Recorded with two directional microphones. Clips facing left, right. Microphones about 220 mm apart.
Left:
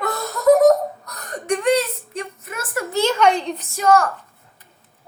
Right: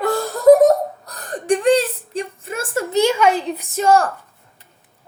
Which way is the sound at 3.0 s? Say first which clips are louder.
Right 1 dB; 10° right (ahead or behind).